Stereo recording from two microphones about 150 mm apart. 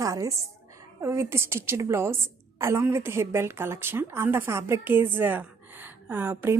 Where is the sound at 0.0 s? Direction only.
25° right (ahead or behind).